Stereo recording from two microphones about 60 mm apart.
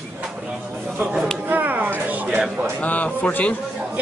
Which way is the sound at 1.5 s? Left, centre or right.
Right.